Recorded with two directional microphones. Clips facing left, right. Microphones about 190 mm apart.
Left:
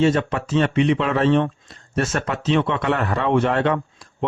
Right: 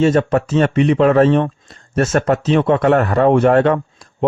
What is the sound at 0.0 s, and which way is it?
Speech, 45° right (ahead or behind).